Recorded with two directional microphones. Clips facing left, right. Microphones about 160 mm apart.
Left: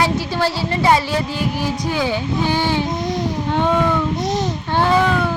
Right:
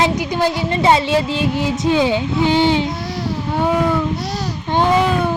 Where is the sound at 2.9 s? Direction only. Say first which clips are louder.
Left 3 dB; 20° left (ahead or behind).